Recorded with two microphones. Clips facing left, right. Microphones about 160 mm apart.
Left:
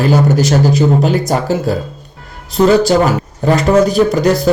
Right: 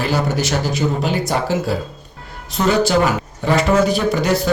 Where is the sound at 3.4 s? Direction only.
40° left (ahead or behind).